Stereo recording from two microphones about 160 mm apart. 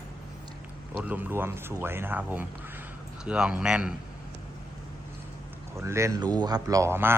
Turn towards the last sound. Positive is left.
turn(degrees=-15)  # may be behind; listen again after turning